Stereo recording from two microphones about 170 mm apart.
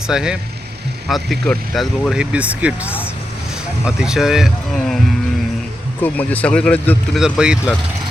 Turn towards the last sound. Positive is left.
turn(degrees=-5)  # may be behind; listen again after turning